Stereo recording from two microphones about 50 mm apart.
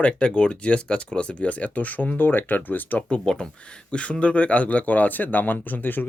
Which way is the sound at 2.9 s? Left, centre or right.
Centre.